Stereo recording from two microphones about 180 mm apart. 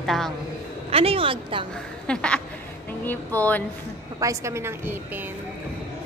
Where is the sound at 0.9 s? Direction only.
30° right (ahead or behind).